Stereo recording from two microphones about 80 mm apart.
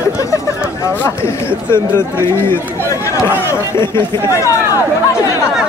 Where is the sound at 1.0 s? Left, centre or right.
Left.